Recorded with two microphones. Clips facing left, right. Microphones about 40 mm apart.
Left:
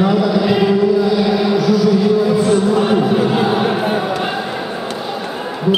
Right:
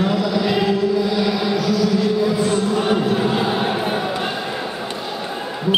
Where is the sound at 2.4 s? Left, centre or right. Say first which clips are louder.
Left 5 dB; centre.